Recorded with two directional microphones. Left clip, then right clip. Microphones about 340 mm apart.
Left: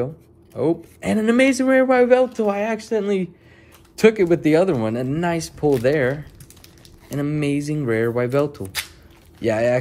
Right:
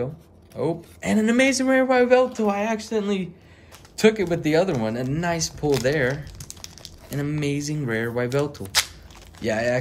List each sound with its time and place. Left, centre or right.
0.6 s speech: centre
6.4 s a sound: right
7.1 s speech: centre